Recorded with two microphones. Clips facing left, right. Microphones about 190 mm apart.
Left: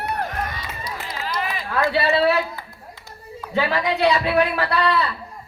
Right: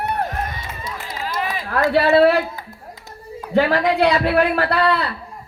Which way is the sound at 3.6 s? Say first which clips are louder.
Right 5 dB; 55° right (ahead or behind).